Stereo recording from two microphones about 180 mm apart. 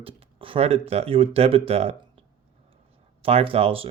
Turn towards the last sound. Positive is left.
turn(degrees=-30)  # may be behind; listen again after turning